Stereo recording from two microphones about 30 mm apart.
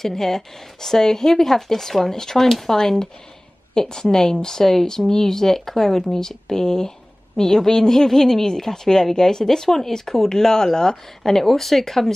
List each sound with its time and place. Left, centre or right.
0.0 s a woman's voice: centre
11.3 s a woman's voice: centre